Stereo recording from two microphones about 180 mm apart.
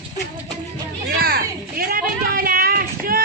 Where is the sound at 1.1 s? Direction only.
60° right (ahead or behind).